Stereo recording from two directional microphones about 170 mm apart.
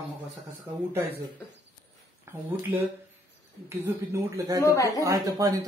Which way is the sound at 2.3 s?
15° right (ahead or behind).